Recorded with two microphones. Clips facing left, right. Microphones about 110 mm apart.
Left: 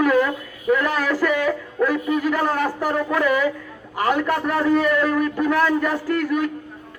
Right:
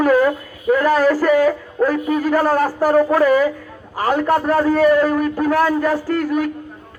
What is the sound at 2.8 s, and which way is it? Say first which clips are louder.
Speech: right 7 dB; 35° right (ahead or behind).